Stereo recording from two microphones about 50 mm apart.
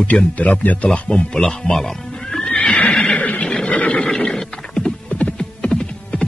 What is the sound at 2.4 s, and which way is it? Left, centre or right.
Horse, left.